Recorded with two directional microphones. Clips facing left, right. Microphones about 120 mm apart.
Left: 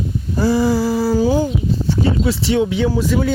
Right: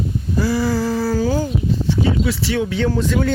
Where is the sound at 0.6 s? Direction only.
10° left (ahead or behind).